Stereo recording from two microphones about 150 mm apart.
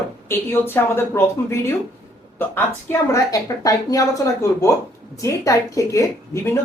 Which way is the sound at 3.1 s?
25° left (ahead or behind).